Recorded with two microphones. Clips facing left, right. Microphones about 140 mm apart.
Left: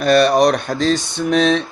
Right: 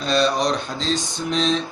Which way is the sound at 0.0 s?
60° left (ahead or behind).